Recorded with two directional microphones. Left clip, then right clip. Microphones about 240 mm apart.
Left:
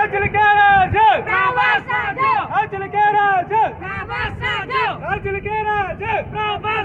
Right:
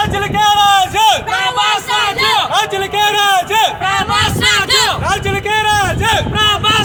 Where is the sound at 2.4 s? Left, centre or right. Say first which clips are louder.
Right 6 dB; right.